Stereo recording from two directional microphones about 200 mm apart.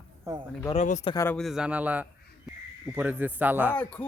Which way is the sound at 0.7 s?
35° left (ahead or behind).